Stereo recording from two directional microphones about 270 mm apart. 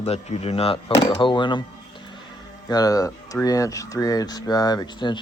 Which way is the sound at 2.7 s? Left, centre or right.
Centre.